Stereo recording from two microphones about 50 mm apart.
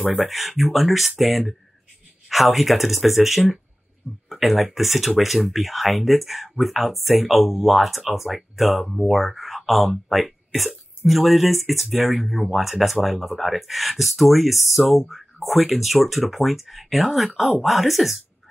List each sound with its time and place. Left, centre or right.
0.1 s speech: centre